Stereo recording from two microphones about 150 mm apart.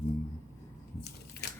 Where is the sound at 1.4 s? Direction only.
90° left.